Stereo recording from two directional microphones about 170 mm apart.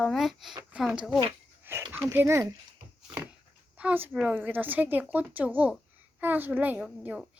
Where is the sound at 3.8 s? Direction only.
10° right (ahead or behind).